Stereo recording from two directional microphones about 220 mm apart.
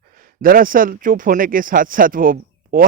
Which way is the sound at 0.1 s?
40° right (ahead or behind).